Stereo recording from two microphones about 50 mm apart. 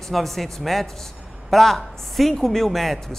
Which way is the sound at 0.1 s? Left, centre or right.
Centre.